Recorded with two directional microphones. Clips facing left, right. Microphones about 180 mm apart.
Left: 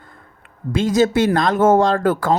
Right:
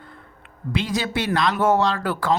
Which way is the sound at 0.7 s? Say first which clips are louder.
Left 9 dB; 45° left (ahead or behind).